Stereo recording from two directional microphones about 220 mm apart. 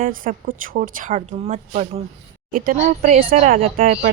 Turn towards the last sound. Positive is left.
turn(degrees=-40)  # may be behind; listen again after turning